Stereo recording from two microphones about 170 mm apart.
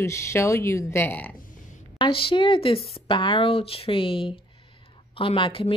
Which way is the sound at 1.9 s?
30° left (ahead or behind).